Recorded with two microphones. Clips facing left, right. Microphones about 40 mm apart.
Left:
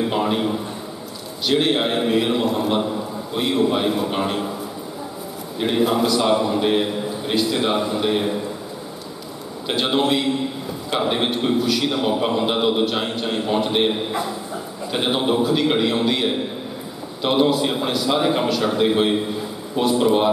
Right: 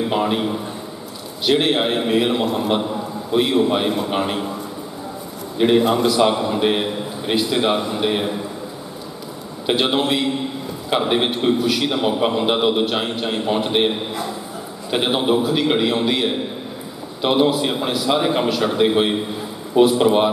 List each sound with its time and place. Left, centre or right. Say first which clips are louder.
0.0 s a man's voice: right 1 dB; centre
5.6 s a man's voice: right 4 dB; centre
6.6 s a man's voice: even; centre
9.7 s a man's voice: right 1 dB; centre